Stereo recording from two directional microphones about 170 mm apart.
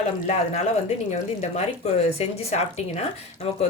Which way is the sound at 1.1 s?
40° left (ahead or behind).